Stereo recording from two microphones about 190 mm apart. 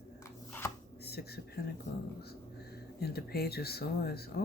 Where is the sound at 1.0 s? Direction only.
55° left (ahead or behind).